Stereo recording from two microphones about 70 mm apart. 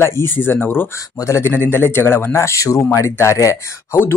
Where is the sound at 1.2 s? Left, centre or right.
Left.